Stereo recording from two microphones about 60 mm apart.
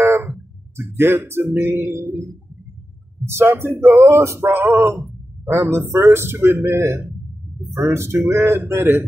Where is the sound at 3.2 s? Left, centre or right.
Right.